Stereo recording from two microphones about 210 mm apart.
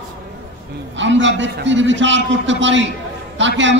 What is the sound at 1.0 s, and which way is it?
A man's voice, 60° right (ahead or behind).